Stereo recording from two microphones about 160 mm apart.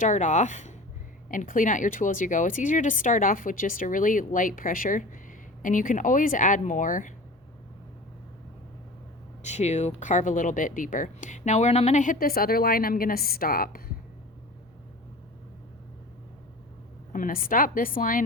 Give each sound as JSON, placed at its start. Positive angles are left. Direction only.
{"t": 0.0, "sound": "speech", "side_deg": 50}
{"t": 9.4, "sound": "speech", "side_deg": 45}
{"t": 17.1, "sound": "speech", "side_deg": 60}